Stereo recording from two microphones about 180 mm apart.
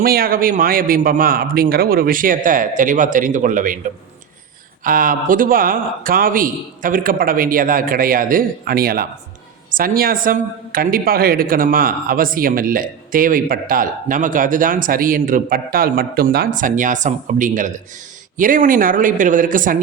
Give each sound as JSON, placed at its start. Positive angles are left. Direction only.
{"t": 0.0, "sound": "a woman's voice", "side_deg": -55}
{"t": 4.8, "sound": "a woman's voice", "side_deg": -50}